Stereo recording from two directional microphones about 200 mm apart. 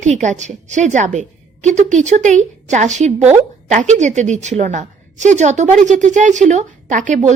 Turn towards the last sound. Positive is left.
turn(degrees=-35)  # may be behind; listen again after turning